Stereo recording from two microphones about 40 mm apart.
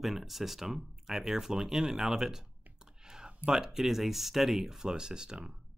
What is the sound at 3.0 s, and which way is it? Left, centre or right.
Clicking, right.